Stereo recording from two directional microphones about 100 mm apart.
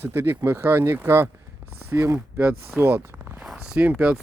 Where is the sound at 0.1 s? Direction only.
25° right (ahead or behind).